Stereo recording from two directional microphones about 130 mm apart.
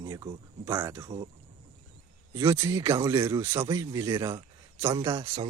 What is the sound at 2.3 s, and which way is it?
Speech, 20° right (ahead or behind).